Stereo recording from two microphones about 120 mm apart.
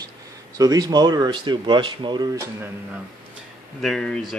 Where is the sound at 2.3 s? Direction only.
25° right (ahead or behind).